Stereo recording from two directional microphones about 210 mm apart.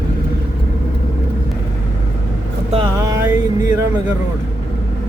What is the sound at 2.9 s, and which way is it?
Speech, 15° right (ahead or behind).